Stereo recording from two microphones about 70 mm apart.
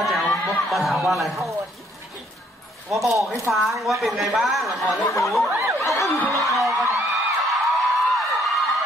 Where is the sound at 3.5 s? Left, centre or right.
Centre.